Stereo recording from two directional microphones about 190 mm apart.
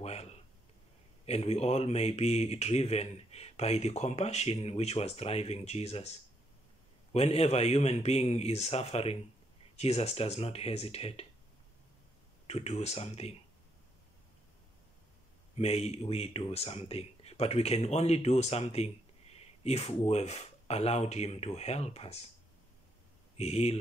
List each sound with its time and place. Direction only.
0.0 s a sound: 35° left (ahead or behind)
1.2 s speech: 35° left (ahead or behind)
12.4 s speech: 35° left (ahead or behind)
15.5 s speech: 35° left (ahead or behind)
23.3 s speech: 35° left (ahead or behind)